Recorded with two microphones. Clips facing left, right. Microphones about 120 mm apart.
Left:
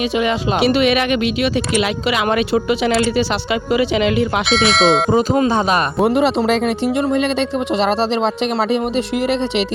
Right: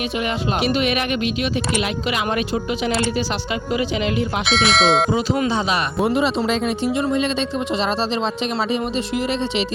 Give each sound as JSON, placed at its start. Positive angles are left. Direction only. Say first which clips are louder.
{"t": 0.5, "sound": "speech", "louder": "left 6 dB", "side_deg": 90}
{"t": 4.4, "sound": "speech", "louder": "left 1 dB", "side_deg": 0}
{"t": 5.1, "sound": "speech", "louder": "left 5 dB", "side_deg": 45}